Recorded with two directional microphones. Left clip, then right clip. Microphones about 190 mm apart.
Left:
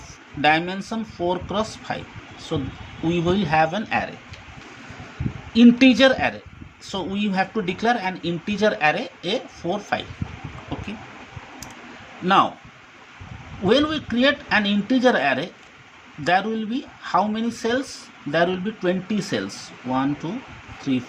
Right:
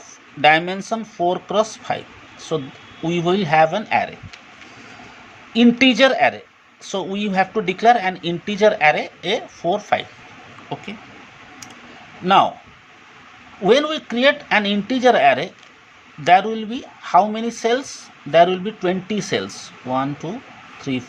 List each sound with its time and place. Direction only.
0.4 s speech: 20° right (ahead or behind)
3.1 s speech: 20° right (ahead or behind)
5.5 s speech: 20° right (ahead or behind)
12.2 s speech: 20° right (ahead or behind)
13.7 s speech: 25° right (ahead or behind)